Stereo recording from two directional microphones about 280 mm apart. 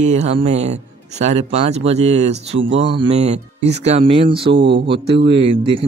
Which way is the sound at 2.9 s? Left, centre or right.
Right.